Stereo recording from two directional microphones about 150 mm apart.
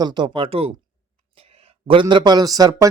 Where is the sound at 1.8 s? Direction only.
35° right (ahead or behind).